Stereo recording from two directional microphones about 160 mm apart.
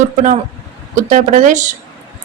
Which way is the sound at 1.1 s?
50° right (ahead or behind).